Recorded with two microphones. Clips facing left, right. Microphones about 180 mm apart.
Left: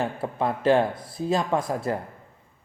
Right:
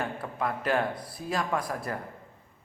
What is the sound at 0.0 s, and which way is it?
A man's voice, 25° left (ahead or behind).